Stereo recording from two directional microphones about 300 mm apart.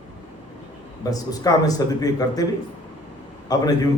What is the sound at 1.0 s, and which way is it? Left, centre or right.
A man's voice, centre.